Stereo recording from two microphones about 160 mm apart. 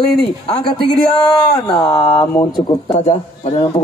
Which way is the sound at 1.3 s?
30° left (ahead or behind).